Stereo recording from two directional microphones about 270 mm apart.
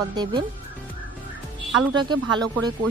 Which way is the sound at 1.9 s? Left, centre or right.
Centre.